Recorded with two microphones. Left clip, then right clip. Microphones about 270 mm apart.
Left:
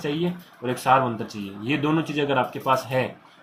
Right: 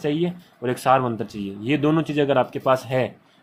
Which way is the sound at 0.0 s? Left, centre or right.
Right.